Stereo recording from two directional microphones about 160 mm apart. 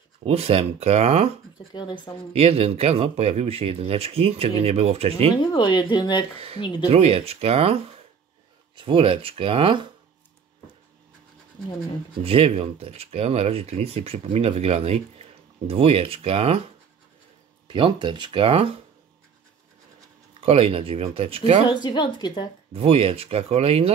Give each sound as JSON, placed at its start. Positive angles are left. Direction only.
{"t": 0.2, "sound": "speech", "side_deg": -40}
{"t": 1.7, "sound": "speech", "side_deg": 25}
{"t": 2.3, "sound": "speech", "side_deg": -40}
{"t": 5.4, "sound": "speech", "side_deg": 30}
{"t": 6.9, "sound": "speech", "side_deg": -40}
{"t": 12.2, "sound": "speech", "side_deg": -35}
{"t": 17.6, "sound": "speech", "side_deg": -30}
{"t": 20.3, "sound": "speech", "side_deg": -35}
{"t": 21.6, "sound": "speech", "side_deg": 30}
{"t": 22.7, "sound": "speech", "side_deg": -40}